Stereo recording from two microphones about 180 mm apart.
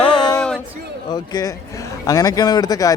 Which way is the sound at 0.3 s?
5° left (ahead or behind).